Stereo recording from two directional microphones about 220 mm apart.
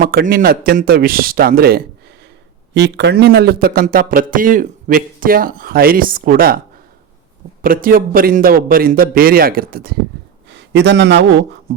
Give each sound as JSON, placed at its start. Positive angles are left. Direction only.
{"t": 0.0, "sound": "a man's voice", "side_deg": -40}
{"t": 7.6, "sound": "a man's voice", "side_deg": -40}